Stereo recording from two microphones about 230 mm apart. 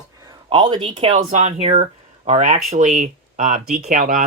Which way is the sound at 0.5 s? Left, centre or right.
Right.